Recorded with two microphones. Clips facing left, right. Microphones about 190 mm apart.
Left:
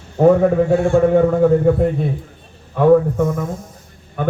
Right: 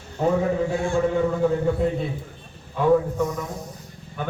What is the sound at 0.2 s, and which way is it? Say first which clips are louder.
A man's voice: left 9 dB; 55° left (ahead or behind).